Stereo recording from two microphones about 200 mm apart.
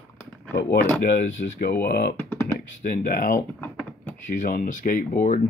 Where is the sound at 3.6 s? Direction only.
10° left (ahead or behind).